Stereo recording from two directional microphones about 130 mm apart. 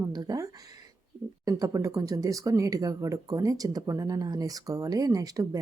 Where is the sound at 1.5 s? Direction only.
25° right (ahead or behind).